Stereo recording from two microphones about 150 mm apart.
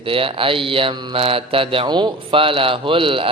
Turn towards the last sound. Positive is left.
turn(degrees=-35)  # may be behind; listen again after turning